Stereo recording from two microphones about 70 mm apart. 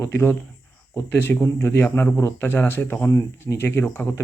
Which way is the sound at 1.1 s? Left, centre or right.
Left.